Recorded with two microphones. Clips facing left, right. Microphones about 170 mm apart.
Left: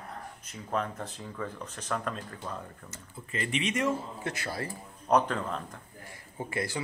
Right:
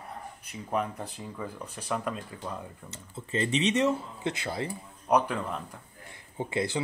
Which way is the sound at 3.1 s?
25° right (ahead or behind).